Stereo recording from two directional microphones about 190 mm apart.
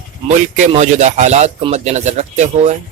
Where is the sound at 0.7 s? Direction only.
40° right (ahead or behind).